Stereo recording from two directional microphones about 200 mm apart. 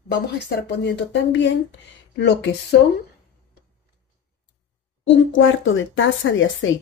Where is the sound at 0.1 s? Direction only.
55° left (ahead or behind).